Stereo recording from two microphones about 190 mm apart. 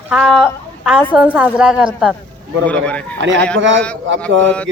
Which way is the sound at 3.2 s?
70° right (ahead or behind).